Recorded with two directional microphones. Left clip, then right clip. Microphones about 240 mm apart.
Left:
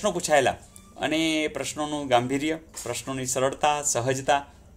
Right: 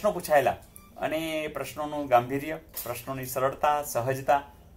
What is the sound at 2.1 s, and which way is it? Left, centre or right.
Speech, left.